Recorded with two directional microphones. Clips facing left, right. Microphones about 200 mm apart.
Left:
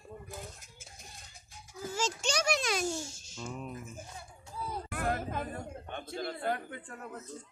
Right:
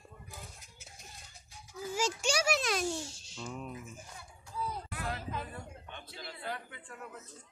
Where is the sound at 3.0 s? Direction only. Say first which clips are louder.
Even; 45° left (ahead or behind).